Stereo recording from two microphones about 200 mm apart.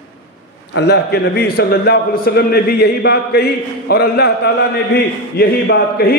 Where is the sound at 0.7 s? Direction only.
55° left (ahead or behind).